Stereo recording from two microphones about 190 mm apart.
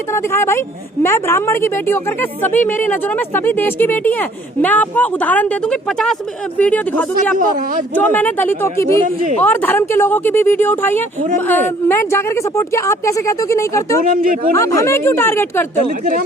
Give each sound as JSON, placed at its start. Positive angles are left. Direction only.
{"t": 0.1, "sound": "a woman's voice", "side_deg": 15}
{"t": 7.3, "sound": "speech", "side_deg": -45}
{"t": 7.9, "sound": "a woman's voice", "side_deg": 10}
{"t": 14.1, "sound": "speech", "side_deg": -45}
{"t": 14.5, "sound": "a woman's voice", "side_deg": 15}